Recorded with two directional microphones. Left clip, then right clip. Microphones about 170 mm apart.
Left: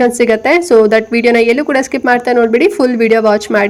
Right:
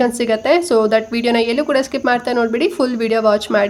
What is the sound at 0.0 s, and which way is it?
A woman's voice, 20° left (ahead or behind).